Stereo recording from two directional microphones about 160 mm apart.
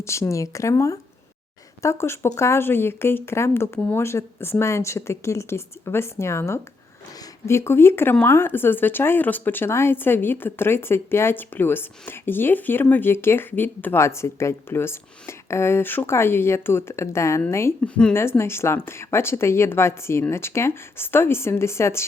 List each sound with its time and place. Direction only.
0.0 s speech: 20° left (ahead or behind)